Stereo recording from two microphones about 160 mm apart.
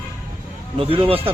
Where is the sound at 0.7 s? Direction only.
35° right (ahead or behind).